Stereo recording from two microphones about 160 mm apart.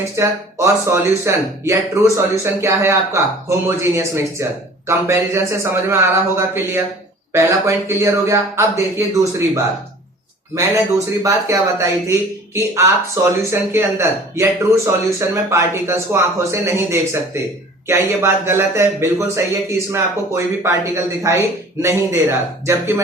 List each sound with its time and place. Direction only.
0.2 s speech: 15° right (ahead or behind)